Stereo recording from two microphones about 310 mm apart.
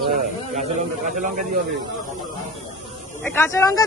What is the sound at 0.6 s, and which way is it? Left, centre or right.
Speech, right.